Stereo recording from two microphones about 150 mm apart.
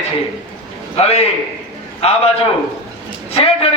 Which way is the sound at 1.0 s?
45° left (ahead or behind).